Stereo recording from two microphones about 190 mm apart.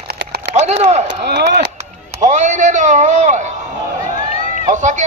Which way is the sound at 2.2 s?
40° right (ahead or behind).